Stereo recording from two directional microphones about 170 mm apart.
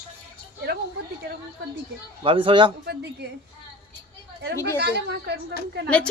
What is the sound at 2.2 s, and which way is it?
Speech, 30° right (ahead or behind).